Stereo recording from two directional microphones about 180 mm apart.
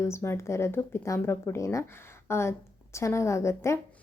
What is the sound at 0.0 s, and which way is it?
A woman's voice, 15° left (ahead or behind).